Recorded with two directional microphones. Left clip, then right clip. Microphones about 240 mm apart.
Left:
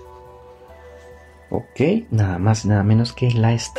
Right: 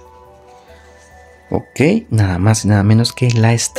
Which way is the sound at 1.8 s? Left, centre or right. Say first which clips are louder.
Right 5 dB; right.